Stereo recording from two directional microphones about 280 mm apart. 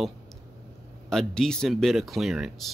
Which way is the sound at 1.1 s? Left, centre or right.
Centre.